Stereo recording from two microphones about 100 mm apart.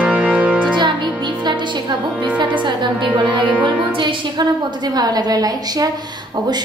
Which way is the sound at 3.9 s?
55° right (ahead or behind).